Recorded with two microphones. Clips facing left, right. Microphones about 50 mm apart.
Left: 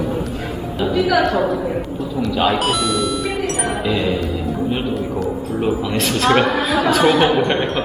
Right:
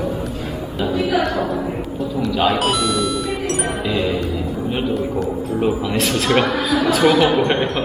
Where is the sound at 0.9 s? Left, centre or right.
Left.